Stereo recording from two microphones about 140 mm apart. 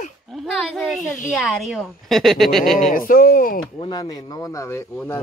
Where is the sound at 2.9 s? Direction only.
90° left.